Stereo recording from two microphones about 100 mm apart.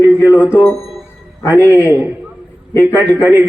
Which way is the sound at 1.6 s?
25° left (ahead or behind).